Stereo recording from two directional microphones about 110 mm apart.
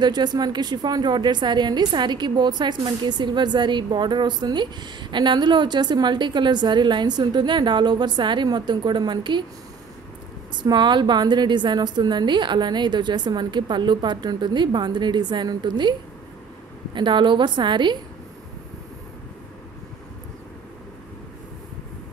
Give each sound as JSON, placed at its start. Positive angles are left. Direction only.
{"t": 0.0, "sound": "a woman's voice", "side_deg": -40}
{"t": 10.5, "sound": "a woman's voice", "side_deg": -45}
{"t": 16.9, "sound": "a woman's voice", "side_deg": -45}